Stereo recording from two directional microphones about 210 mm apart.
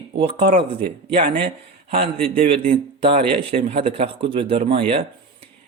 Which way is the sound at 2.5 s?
25° right (ahead or behind).